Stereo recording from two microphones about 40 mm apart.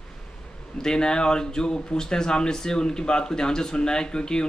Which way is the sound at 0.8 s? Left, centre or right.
Centre.